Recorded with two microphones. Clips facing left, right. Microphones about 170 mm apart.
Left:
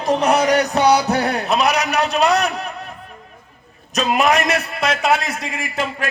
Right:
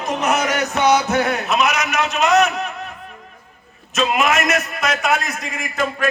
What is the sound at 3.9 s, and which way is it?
A man's voice, 40° left (ahead or behind).